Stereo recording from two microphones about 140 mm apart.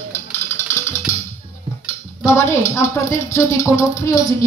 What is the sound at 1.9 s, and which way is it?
Speech, 15° left (ahead or behind).